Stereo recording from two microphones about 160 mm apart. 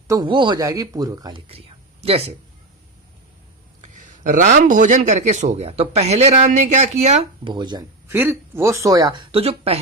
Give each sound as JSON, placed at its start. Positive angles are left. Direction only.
{"t": 0.1, "sound": "speech", "side_deg": -30}
{"t": 1.5, "sound": "a sound", "side_deg": -40}
{"t": 3.8, "sound": "a man's voice", "side_deg": -50}
{"t": 7.4, "sound": "speech", "side_deg": -25}
{"t": 8.1, "sound": "speech", "side_deg": -15}
{"t": 9.3, "sound": "speech", "side_deg": -40}